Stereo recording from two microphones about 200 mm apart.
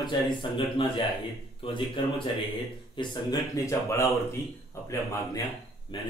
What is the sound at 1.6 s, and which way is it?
Speech, 25° left (ahead or behind).